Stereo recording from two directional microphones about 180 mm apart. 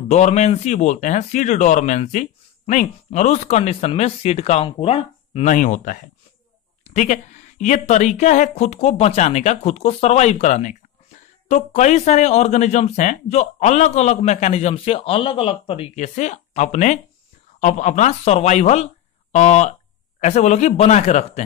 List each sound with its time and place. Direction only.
0.1 s speech: 40° left (ahead or behind)
5.5 s speech: 45° left (ahead or behind)